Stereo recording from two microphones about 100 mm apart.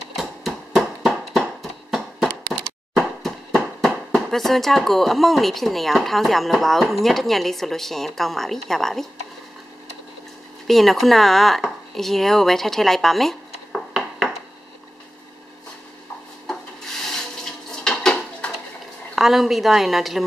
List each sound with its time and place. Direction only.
0.1 s a sound: centre (ahead or behind)
2.5 s speech: 5° left (ahead or behind)
10.7 s speech: centre (ahead or behind)
17.1 s water: 5° left (ahead or behind)
19.1 s a woman's voice: centre (ahead or behind)